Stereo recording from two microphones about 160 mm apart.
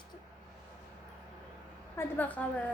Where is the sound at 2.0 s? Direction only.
10° left (ahead or behind).